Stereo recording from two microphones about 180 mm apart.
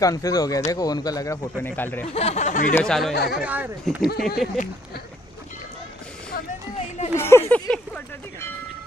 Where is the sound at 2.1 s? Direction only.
35° left (ahead or behind).